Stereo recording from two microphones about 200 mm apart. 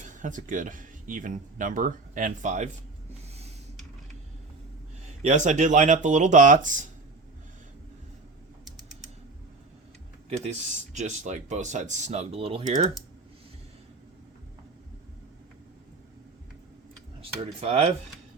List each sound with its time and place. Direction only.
0.0 s speech: 40° right (ahead or behind)
5.2 s speech: 40° right (ahead or behind)
10.2 s speech: 35° right (ahead or behind)
17.2 s speech: 30° right (ahead or behind)